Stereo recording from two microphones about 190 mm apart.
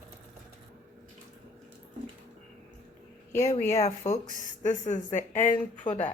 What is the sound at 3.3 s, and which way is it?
Speech, 15° left (ahead or behind).